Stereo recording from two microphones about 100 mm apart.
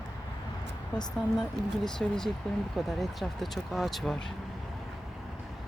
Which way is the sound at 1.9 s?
5° left (ahead or behind).